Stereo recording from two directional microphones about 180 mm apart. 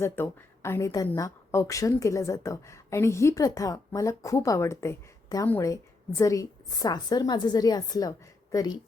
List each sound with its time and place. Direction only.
0.0 s a woman's voice: 15° left (ahead or behind)